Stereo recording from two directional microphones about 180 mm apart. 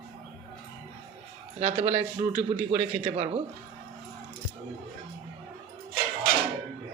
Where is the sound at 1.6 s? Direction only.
35° right (ahead or behind).